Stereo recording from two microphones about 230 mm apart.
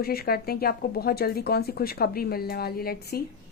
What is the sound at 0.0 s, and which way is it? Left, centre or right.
Speech, left.